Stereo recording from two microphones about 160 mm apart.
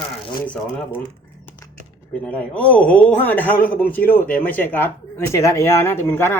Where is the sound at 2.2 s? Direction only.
10° left (ahead or behind).